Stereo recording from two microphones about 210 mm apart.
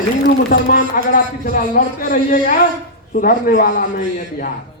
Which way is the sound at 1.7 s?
40° left (ahead or behind).